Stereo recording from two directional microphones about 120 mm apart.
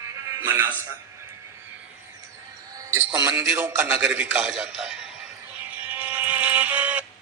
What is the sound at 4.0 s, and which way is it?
A man's voice, 10° right (ahead or behind).